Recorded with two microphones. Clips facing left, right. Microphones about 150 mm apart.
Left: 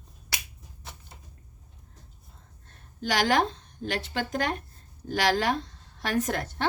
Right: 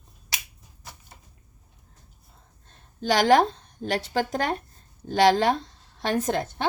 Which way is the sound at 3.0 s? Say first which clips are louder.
Right 6 dB; 30° right (ahead or behind).